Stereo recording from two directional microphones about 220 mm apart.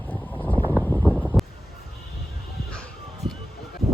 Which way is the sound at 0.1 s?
10° left (ahead or behind).